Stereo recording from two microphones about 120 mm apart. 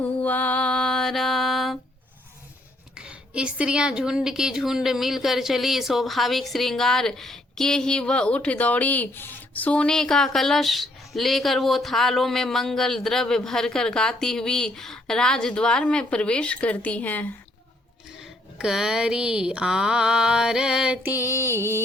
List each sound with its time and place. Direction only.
0.0 s mantra: 15° left (ahead or behind)
3.0 s a woman's voice: 10° right (ahead or behind); by 17.2 s 15° left (ahead or behind)
18.6 s mantra: 5° right (ahead or behind); by 21.8 s 20° right (ahead or behind)